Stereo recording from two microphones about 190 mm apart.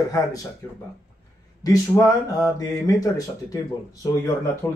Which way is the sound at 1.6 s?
20° left (ahead or behind).